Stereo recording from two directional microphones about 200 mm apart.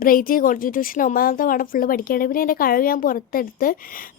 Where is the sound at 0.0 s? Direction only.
45° left (ahead or behind).